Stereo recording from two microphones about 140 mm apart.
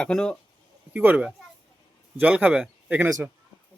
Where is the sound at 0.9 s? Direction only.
10° right (ahead or behind).